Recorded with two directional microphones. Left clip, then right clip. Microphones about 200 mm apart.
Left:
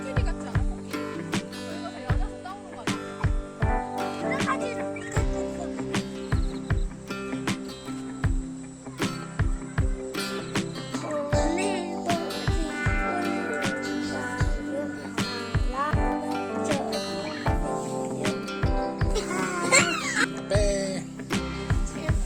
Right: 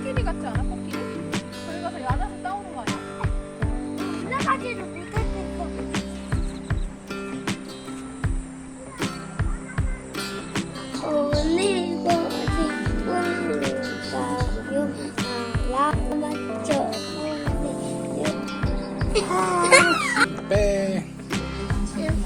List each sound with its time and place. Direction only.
0.5 s music: centre (ahead or behind)
3.6 s music: centre (ahead or behind)
5.9 s music: centre (ahead or behind)
9.0 s music: centre (ahead or behind)
20.6 s music: 20° left (ahead or behind)
21.2 s music: centre (ahead or behind)